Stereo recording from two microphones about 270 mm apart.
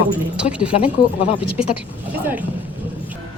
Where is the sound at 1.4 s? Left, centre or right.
Centre.